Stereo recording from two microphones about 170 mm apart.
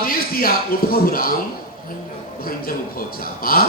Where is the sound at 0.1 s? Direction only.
60° left (ahead or behind).